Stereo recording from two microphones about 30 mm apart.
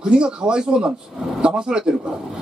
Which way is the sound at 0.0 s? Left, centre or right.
Right.